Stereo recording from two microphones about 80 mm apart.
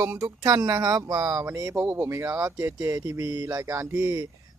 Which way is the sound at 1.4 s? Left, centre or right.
Right.